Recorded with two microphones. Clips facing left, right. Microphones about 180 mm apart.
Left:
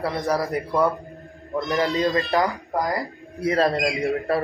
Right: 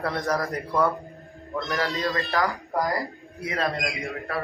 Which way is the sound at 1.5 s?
20° left (ahead or behind).